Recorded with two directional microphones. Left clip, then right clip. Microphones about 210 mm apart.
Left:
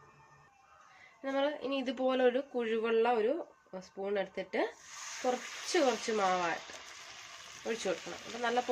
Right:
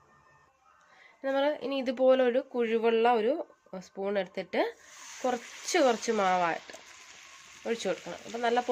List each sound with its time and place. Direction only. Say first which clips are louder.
1.2 s speech: right 5 dB; 50° right (ahead or behind)
5.7 s speech: right 5 dB; 45° right (ahead or behind)
7.6 s speech: right 4 dB; 45° right (ahead or behind)